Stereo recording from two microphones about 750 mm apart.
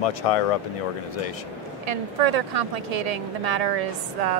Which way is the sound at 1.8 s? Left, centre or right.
Right.